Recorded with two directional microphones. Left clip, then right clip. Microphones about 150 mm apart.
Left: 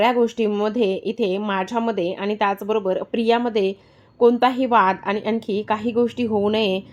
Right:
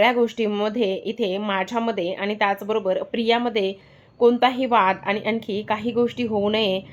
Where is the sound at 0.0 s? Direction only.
40° left (ahead or behind).